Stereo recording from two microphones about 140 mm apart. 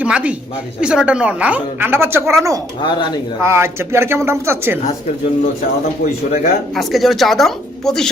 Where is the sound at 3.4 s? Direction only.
20° right (ahead or behind).